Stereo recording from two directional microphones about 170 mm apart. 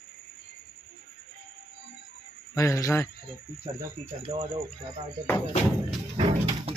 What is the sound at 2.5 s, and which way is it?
Speech, 20° left (ahead or behind).